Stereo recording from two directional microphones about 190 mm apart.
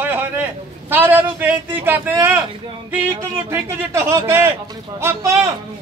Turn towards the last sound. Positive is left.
turn(degrees=-15)  # may be behind; listen again after turning